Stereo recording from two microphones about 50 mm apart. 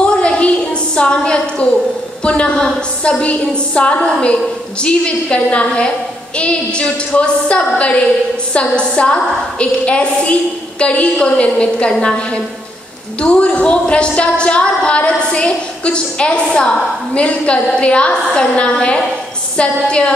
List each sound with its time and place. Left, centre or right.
0.0 s a sound: left
0.9 s a woman's voice: left
13.2 s a woman's voice: left